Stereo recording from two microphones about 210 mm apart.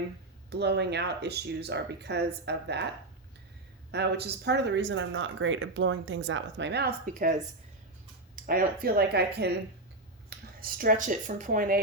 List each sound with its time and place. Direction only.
0.5 s speech: 50° right (ahead or behind)
3.9 s speech: 55° right (ahead or behind)
8.4 s speech: 45° right (ahead or behind)